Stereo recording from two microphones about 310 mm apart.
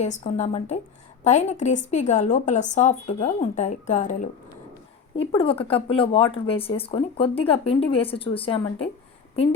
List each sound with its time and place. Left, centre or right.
0.0 s a woman's voice: left
5.3 s speech: centre